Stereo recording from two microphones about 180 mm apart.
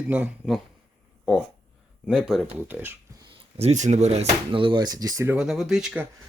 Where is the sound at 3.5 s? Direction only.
40° right (ahead or behind); by 5.3 s 20° right (ahead or behind).